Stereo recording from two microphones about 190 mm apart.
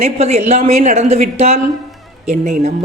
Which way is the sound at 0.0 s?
35° right (ahead or behind).